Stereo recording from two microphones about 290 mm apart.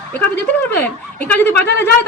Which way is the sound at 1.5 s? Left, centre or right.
Left.